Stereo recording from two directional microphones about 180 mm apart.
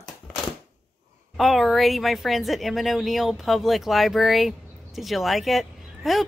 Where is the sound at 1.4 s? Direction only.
Centre (ahead or behind).